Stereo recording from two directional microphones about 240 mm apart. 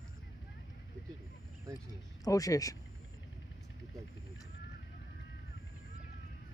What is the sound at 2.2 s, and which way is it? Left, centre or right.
Speech, centre.